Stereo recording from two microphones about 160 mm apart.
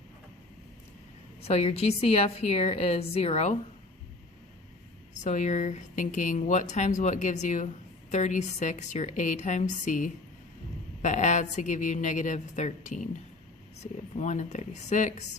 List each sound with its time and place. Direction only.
1.5 s a woman's voice: 40° left (ahead or behind)
5.2 s speech: 50° left (ahead or behind)